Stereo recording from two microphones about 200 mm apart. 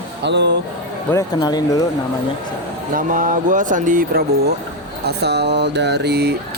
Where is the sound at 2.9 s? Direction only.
40° right (ahead or behind).